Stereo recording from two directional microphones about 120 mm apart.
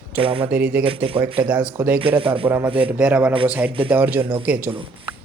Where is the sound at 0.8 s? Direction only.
50° right (ahead or behind).